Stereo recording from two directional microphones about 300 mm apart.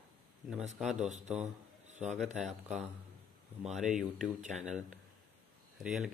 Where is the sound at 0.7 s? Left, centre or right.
Centre.